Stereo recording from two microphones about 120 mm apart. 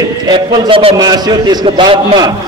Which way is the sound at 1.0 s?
35° right (ahead or behind).